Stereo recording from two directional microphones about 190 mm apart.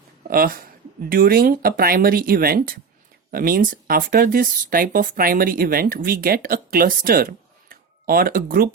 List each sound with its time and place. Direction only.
0.3 s speech: 50° right (ahead or behind)